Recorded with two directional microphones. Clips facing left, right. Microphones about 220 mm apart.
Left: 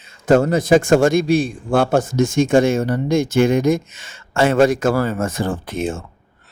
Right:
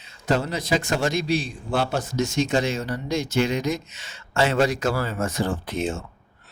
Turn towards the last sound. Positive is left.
turn(degrees=50)  # may be behind; listen again after turning